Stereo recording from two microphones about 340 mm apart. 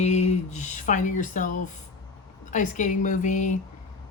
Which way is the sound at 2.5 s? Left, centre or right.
Left.